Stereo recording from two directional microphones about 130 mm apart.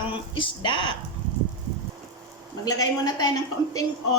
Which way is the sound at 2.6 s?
30° left (ahead or behind).